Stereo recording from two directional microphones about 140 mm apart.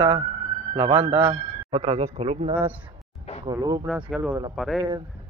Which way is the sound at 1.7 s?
45° right (ahead or behind).